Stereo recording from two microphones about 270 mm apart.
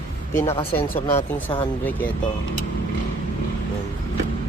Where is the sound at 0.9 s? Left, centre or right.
Centre.